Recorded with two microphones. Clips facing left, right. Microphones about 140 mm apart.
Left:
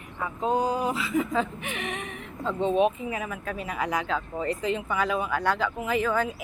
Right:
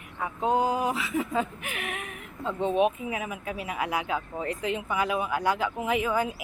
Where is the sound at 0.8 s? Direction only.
15° right (ahead or behind).